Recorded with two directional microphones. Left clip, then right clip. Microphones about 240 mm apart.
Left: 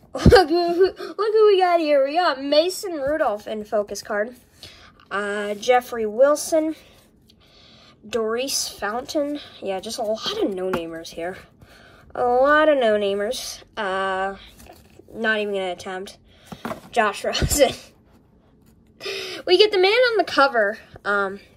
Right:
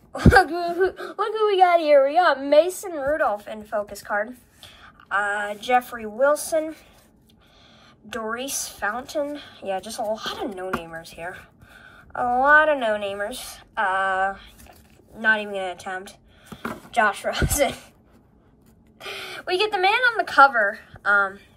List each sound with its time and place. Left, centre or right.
0.1 s speech: centre
8.4 s speech: centre
18.9 s a woman's voice: centre